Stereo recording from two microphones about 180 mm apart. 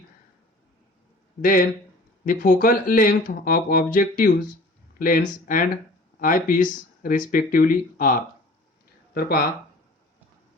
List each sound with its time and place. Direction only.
1.4 s speech: 50° left (ahead or behind)